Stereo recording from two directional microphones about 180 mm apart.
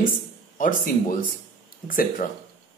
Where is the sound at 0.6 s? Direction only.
50° left (ahead or behind).